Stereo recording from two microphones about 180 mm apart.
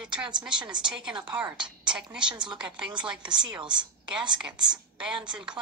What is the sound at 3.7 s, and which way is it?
A woman's voice, 5° right (ahead or behind).